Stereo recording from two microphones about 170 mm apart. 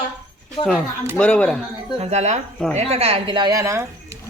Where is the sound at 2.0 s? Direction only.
40° right (ahead or behind); by 3.8 s 20° right (ahead or behind).